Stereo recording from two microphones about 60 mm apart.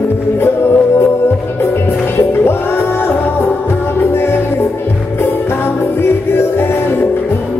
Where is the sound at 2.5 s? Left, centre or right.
Left.